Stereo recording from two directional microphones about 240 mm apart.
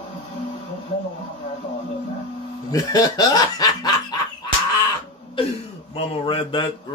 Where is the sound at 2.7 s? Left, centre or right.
Centre.